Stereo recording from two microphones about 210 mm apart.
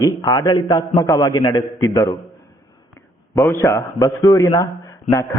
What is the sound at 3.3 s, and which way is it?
A man's voice, 10° left (ahead or behind).